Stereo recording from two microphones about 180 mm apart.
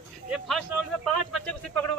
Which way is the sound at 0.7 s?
15° right (ahead or behind).